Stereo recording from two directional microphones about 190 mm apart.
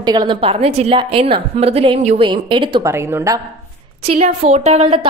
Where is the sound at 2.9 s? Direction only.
15° right (ahead or behind).